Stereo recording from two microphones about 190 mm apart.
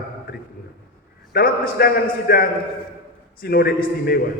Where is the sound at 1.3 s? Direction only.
50° left (ahead or behind).